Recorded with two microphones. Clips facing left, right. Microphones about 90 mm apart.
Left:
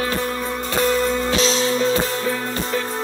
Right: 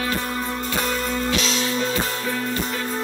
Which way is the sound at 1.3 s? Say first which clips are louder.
Left 4 dB; 30° left (ahead or behind).